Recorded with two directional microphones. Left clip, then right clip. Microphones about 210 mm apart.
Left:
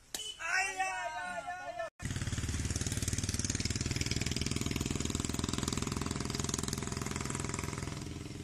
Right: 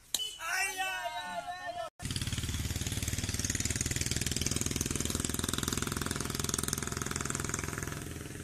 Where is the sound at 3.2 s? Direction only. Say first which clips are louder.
Right 2 dB; 45° left (ahead or behind).